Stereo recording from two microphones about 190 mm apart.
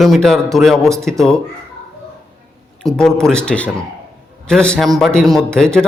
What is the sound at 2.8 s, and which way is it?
A man's voice, 5° left (ahead or behind).